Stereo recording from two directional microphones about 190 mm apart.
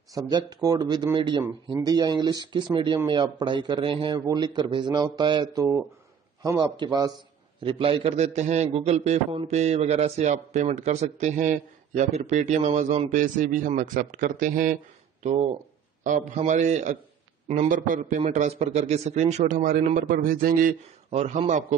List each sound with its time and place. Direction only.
0.1 s a man's voice: 20° right (ahead or behind); by 21.7 s 40° right (ahead or behind)